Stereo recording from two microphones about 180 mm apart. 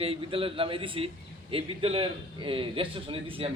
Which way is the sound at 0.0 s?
30° right (ahead or behind).